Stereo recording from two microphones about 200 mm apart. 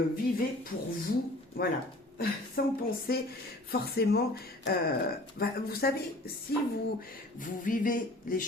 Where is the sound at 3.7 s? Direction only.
50° left (ahead or behind).